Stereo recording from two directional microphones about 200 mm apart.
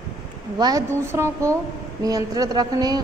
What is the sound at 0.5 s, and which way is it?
A woman's voice, 20° right (ahead or behind).